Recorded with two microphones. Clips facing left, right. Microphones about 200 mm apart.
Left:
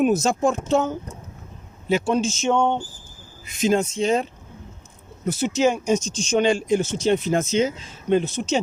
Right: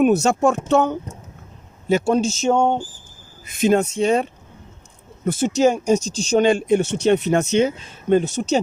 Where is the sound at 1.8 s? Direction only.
45° right (ahead or behind).